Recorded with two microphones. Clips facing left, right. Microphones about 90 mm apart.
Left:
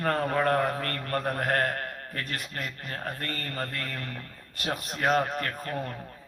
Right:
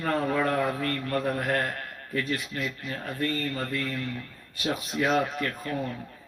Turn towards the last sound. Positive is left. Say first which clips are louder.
# right 1 dB
turn(degrees=45)  # may be behind; listen again after turning